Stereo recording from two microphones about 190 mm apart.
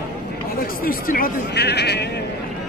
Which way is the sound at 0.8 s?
50° left (ahead or behind).